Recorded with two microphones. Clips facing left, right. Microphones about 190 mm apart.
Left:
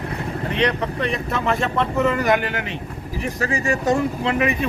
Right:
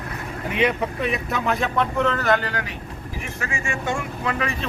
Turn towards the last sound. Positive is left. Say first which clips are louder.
# left 5 dB
turn(degrees=20)  # may be behind; listen again after turning